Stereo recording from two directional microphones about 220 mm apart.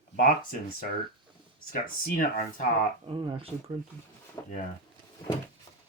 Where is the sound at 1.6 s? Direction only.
40° left (ahead or behind).